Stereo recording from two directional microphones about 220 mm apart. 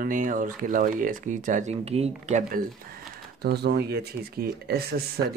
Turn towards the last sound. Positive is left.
turn(degrees=-45)  # may be behind; listen again after turning